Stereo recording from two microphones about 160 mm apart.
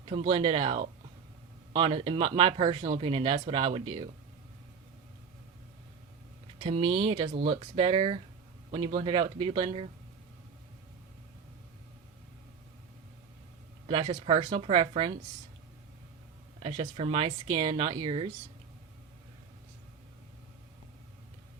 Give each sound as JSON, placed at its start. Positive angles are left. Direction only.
{"t": 0.0, "sound": "speech", "side_deg": -35}
{"t": 6.6, "sound": "speech", "side_deg": -35}
{"t": 13.8, "sound": "speech", "side_deg": -35}
{"t": 17.0, "sound": "speech", "side_deg": -35}